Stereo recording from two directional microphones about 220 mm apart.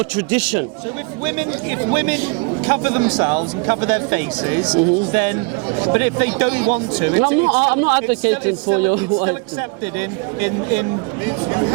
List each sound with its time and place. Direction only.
1.9 s a man's voice: 15° right (ahead or behind)